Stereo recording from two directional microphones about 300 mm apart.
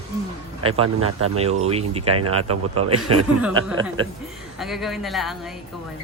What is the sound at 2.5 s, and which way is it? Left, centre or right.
Speech, right.